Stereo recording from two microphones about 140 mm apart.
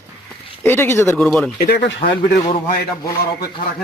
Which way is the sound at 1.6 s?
90° left.